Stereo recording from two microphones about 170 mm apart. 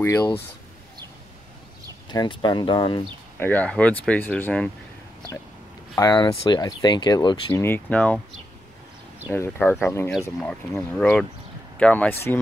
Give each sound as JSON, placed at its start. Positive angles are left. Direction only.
{"t": 0.0, "sound": "speech", "side_deg": 15}
{"t": 2.0, "sound": "speech", "side_deg": 25}
{"t": 3.3, "sound": "speech", "side_deg": 10}
{"t": 5.9, "sound": "speech", "side_deg": 25}
{"t": 7.6, "sound": "speech", "side_deg": 10}
{"t": 9.3, "sound": "speech", "side_deg": 10}